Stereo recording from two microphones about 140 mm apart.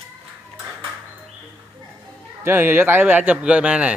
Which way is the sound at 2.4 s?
15° right (ahead or behind).